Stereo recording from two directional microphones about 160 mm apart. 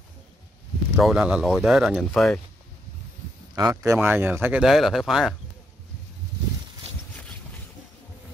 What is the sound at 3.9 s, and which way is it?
Speech, 10° right (ahead or behind).